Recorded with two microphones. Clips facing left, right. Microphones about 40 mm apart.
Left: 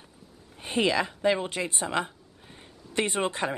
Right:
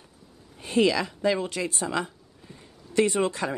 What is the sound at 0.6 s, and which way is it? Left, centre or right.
Speech, left.